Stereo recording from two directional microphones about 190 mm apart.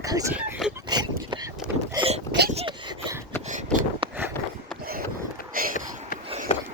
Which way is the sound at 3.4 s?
40° right (ahead or behind).